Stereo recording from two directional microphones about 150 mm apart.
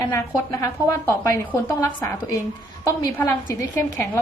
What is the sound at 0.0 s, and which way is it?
A woman's voice, 20° left (ahead or behind).